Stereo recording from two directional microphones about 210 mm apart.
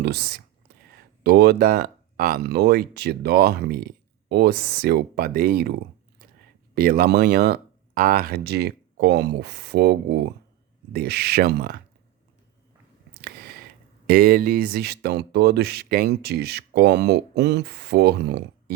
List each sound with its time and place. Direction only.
0.0 s speech: 50° right (ahead or behind)
0.7 s a sound: 45° right (ahead or behind)
1.2 s speech: 50° right (ahead or behind)
6.7 s speech: 45° right (ahead or behind)
14.1 s speech: 45° right (ahead or behind)